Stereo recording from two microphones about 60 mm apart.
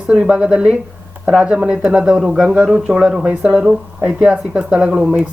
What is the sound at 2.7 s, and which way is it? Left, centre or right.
Speech, centre.